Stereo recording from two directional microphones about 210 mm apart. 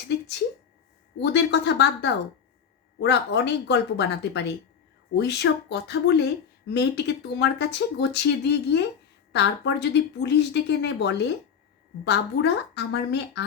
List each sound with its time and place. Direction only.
1.2 s speech: 55° left (ahead or behind)